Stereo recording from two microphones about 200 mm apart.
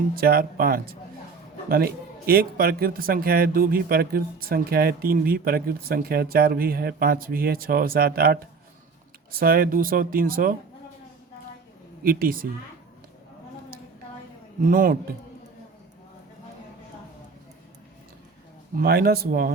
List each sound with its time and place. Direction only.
0.2 s speech: 50° right (ahead or behind)
12.0 s speech: 45° right (ahead or behind)
14.6 s speech: 45° right (ahead or behind)
18.8 s speech: 50° right (ahead or behind)